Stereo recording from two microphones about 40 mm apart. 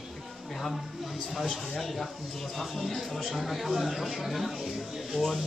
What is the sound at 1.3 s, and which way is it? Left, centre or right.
Speech, centre.